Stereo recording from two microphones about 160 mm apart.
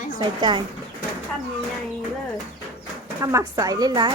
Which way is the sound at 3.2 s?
20° right (ahead or behind).